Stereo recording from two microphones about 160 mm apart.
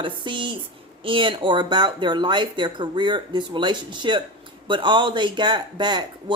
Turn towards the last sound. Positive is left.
turn(degrees=-30)  # may be behind; listen again after turning